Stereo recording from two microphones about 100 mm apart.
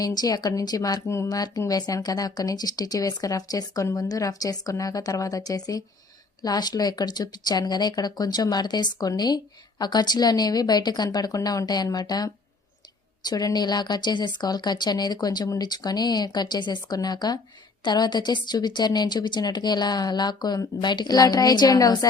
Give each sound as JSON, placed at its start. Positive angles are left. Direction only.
{"t": 0.0, "sound": "speech", "side_deg": 40}